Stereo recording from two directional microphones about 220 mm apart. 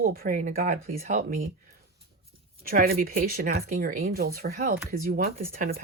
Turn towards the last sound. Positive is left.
turn(degrees=-40)  # may be behind; listen again after turning